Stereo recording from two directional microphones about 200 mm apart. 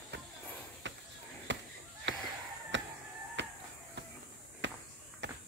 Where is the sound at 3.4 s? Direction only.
60° right (ahead or behind).